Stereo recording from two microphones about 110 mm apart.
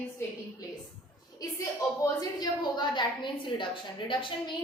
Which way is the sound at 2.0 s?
30° left (ahead or behind).